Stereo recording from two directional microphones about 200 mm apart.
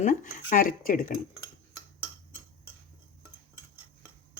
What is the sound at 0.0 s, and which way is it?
Speech, 40° left (ahead or behind).